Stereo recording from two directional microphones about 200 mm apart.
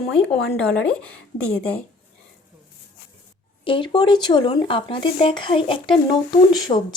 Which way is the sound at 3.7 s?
25° left (ahead or behind).